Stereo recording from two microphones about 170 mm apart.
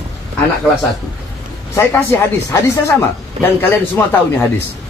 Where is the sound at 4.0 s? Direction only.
15° left (ahead or behind).